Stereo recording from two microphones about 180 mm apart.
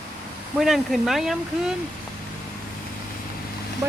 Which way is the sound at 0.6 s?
Centre (ahead or behind).